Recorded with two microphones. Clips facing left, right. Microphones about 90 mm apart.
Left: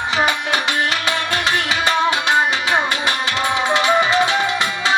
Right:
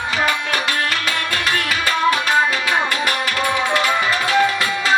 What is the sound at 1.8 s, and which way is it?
Music, 20° left (ahead or behind).